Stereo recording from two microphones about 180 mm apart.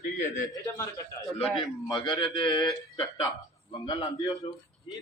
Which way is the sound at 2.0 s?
25° left (ahead or behind).